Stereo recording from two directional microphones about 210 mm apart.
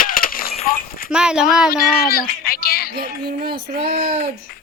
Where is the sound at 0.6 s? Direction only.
40° left (ahead or behind).